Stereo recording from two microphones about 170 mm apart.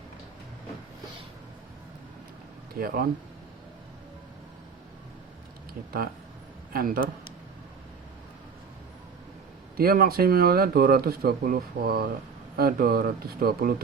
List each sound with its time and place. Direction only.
2.7 s speech: 60° right (ahead or behind)
6.7 s speech: 60° right (ahead or behind)
9.7 s speech: 60° right (ahead or behind)